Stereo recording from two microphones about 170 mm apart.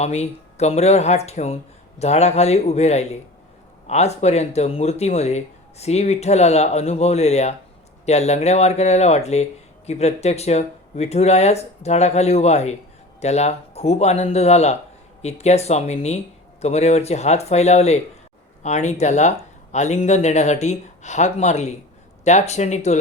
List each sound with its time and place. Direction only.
0.0 s speech: 40° left (ahead or behind)